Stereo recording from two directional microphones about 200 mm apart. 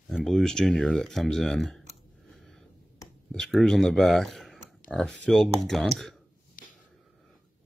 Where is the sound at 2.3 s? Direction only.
Centre (ahead or behind).